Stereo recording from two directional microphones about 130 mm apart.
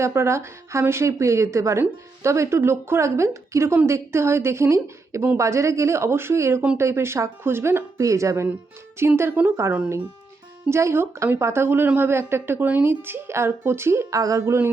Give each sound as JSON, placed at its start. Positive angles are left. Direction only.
{"t": 0.0, "sound": "speech", "side_deg": -20}